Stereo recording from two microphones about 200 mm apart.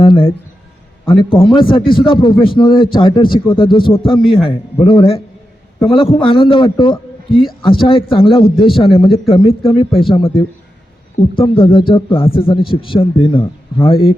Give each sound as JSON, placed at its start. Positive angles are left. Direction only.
{"t": 0.0, "sound": "a sound", "side_deg": 25}
{"t": 1.1, "sound": "a man's voice", "side_deg": 25}
{"t": 6.2, "sound": "a man's voice", "side_deg": 25}